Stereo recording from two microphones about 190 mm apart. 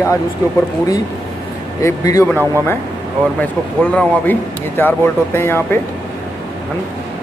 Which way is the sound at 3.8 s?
10° left (ahead or behind).